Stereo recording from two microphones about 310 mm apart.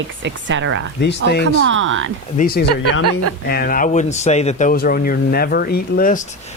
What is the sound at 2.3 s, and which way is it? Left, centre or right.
Speech, left.